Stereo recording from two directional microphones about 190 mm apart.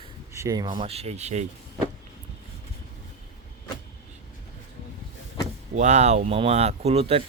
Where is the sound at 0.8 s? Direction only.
35° right (ahead or behind).